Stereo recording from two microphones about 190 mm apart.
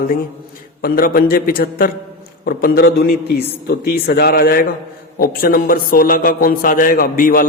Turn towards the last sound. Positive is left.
turn(degrees=50)  # may be behind; listen again after turning